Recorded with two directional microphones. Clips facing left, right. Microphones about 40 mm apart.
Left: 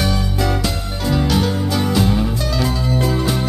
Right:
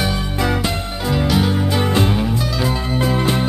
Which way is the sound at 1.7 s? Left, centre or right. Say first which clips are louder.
Left 1 dB; right.